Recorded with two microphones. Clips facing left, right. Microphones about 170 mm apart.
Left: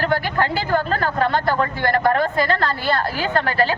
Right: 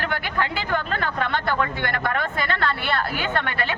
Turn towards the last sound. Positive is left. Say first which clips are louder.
# left 6 dB
turn(degrees=35)  # may be behind; listen again after turning